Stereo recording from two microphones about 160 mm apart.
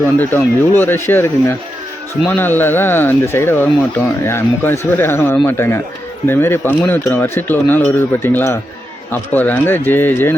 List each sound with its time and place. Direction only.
0.2 s speech: 15° left (ahead or behind)